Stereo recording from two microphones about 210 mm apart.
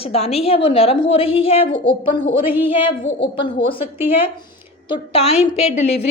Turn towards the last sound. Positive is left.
turn(degrees=30)  # may be behind; listen again after turning